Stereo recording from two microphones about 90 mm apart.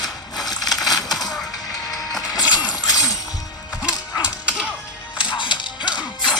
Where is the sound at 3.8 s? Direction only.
10° right (ahead or behind).